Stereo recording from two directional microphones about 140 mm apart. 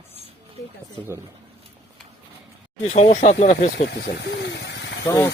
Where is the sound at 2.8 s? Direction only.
55° left (ahead or behind).